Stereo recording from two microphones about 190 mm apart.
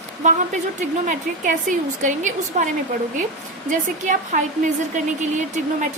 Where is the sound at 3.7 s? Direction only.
40° right (ahead or behind).